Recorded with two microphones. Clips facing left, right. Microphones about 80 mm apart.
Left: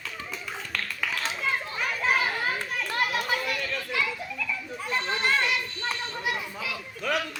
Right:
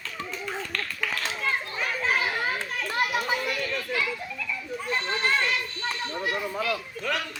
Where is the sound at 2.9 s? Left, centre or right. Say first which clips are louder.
Right 1 dB; right.